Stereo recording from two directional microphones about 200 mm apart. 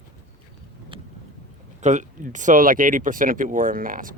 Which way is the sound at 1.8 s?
40° right (ahead or behind).